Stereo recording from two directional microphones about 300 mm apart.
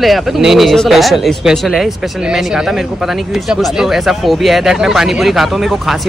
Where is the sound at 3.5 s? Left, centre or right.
Centre.